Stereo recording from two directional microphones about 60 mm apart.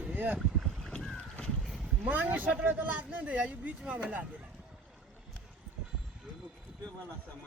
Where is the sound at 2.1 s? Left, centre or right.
Right.